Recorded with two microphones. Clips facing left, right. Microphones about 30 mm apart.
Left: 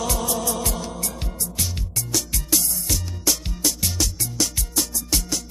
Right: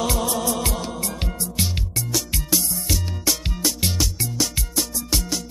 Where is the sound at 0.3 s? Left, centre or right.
Right.